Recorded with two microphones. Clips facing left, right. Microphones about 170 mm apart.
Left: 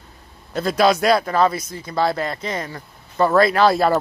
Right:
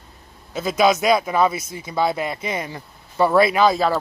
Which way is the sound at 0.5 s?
5° right (ahead or behind).